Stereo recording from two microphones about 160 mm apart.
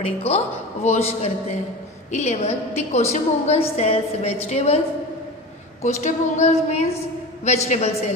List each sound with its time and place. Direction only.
0.0 s a woman's voice: 40° left (ahead or behind)